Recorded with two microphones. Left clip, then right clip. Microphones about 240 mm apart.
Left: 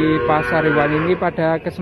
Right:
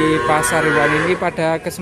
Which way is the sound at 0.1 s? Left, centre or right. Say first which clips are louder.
Right 1 dB; centre.